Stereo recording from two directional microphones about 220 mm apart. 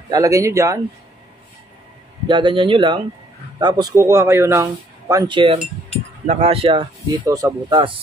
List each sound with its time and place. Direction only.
0.1 s speech: 15° right (ahead or behind)
2.2 s speech: 20° right (ahead or behind)